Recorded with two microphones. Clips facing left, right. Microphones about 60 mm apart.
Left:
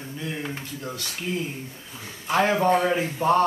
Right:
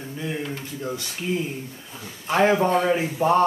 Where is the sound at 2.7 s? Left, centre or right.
Centre.